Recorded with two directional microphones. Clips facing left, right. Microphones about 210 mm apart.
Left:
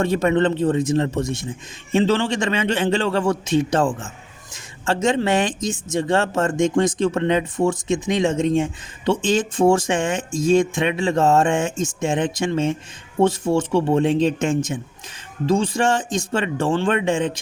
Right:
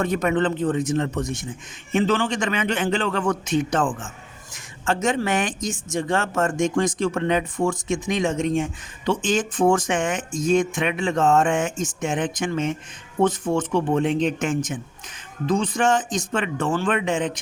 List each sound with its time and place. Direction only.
0.0 s speech: 30° left (ahead or behind)